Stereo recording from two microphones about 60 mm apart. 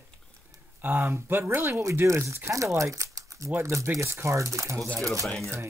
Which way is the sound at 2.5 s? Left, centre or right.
Right.